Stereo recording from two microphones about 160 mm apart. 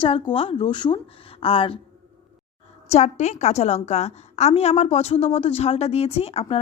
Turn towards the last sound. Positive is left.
turn(degrees=40)  # may be behind; listen again after turning